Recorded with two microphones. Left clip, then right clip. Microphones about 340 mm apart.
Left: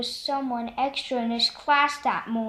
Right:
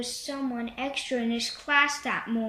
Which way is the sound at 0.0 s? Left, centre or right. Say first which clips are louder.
Left 5 dB; centre.